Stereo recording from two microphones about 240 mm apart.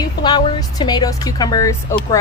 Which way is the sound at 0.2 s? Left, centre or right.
Centre.